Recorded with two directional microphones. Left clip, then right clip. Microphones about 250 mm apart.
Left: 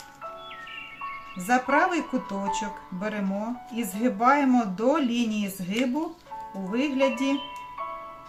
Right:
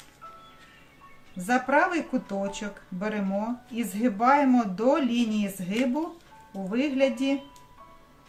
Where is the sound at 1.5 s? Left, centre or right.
Centre.